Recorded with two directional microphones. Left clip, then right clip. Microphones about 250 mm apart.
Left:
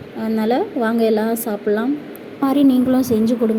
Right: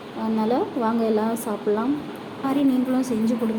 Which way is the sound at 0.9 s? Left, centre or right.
Left.